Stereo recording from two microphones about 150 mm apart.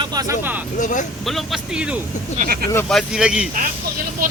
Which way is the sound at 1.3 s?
Centre (ahead or behind).